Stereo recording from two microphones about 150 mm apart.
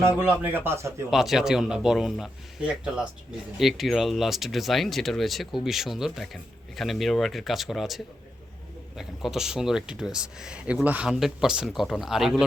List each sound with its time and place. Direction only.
0.2 s speech: 15° right (ahead or behind)
1.1 s speech: centre (ahead or behind)